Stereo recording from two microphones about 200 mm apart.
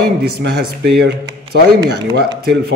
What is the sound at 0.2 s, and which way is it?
Speech, 50° right (ahead or behind).